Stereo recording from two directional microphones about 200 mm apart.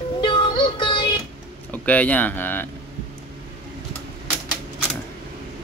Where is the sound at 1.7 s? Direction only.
5° left (ahead or behind).